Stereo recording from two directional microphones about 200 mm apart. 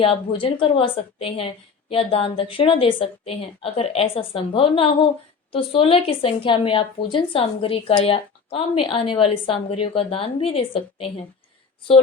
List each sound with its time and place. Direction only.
0.0 s a woman's voice: 25° left (ahead or behind)